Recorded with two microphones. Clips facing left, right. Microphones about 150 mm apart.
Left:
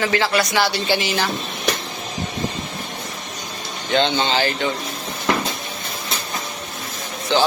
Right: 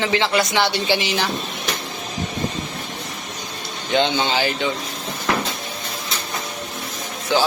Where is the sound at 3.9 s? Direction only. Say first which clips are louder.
Even; 15° right (ahead or behind).